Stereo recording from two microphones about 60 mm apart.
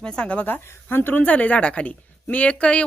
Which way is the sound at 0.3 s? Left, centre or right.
Left.